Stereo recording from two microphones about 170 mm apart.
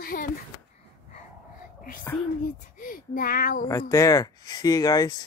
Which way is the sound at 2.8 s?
55° left (ahead or behind).